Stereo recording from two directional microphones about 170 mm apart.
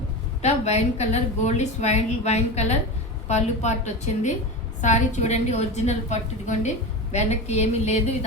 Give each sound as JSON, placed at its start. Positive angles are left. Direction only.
{"t": 0.4, "sound": "a woman's voice", "side_deg": 40}